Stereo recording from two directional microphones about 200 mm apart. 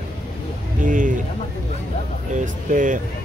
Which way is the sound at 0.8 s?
40° right (ahead or behind).